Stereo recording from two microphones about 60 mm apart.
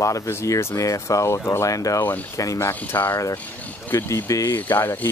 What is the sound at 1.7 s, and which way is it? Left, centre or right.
Speech, left.